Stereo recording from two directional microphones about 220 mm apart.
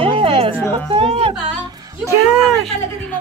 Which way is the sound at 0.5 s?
10° left (ahead or behind).